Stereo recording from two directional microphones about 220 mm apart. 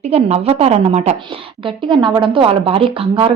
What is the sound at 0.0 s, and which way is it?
A woman's voice, 30° right (ahead or behind).